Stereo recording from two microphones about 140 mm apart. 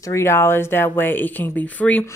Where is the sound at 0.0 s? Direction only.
20° left (ahead or behind).